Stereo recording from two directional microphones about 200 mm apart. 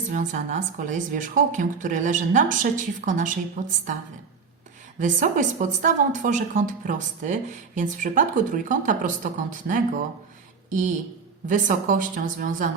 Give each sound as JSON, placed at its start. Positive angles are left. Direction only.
{"t": 0.1, "sound": "a woman's voice", "side_deg": -40}
{"t": 4.9, "sound": "a woman's voice", "side_deg": -40}
{"t": 11.4, "sound": "a woman's voice", "side_deg": -40}